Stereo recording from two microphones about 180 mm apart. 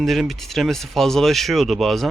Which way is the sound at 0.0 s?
Centre (ahead or behind).